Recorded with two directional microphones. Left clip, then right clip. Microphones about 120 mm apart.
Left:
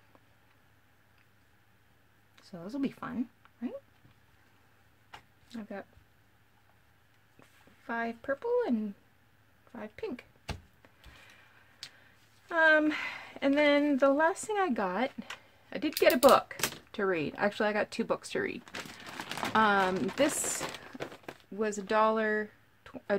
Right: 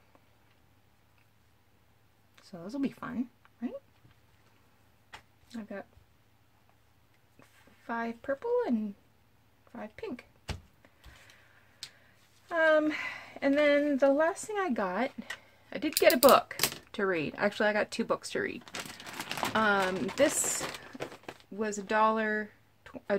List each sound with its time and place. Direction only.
2.3 s speech: 15° left (ahead or behind)
5.5 s speech: 15° left (ahead or behind)
7.3 s speech: 15° left (ahead or behind)
11.8 s a sound: 20° left (ahead or behind)
12.4 s a woman's voice: 40° left (ahead or behind)
14.6 s speech: 20° left (ahead or behind)
16.0 s speech: 10° left (ahead or behind)
18.7 s a sound: 20° right (ahead or behind)
19.5 s speech: 25° left (ahead or behind)
21.0 s a sound: 5° left (ahead or behind)
21.5 s speech: 20° left (ahead or behind)